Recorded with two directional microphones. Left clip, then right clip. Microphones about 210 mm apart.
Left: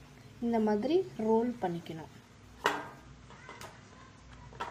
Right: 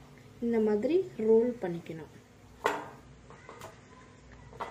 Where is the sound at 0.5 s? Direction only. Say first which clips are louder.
Right 2 dB; 30° left (ahead or behind).